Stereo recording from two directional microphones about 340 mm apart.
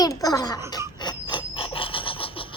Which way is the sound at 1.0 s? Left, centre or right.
Centre.